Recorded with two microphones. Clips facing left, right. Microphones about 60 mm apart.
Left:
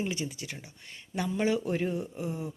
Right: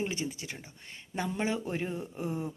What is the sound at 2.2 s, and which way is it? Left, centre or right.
Speech, right.